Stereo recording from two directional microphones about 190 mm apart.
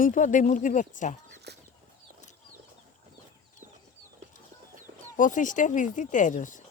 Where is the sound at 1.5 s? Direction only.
60° right (ahead or behind).